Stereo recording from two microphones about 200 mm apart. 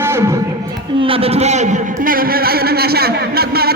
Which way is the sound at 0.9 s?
25° right (ahead or behind).